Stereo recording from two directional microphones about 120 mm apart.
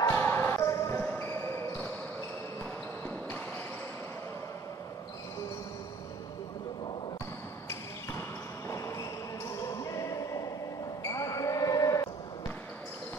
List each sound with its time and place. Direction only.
0.1 s basketball bounce: 20° left (ahead or behind)
8.6 s a sound: 25° left (ahead or behind)
9.6 s basketball bounce: 25° left (ahead or behind)